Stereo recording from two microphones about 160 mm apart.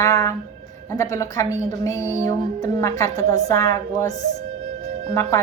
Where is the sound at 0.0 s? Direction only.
20° left (ahead or behind).